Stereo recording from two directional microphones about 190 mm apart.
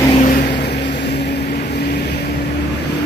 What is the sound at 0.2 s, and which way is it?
Vehicle, 40° left (ahead or behind).